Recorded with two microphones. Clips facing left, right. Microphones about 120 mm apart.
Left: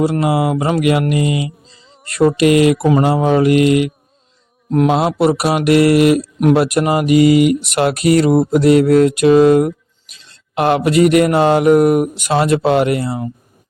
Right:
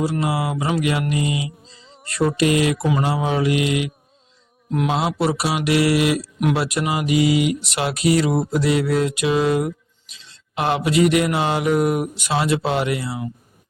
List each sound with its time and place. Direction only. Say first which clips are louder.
0.0 s speech: left 7 dB; 60° left (ahead or behind)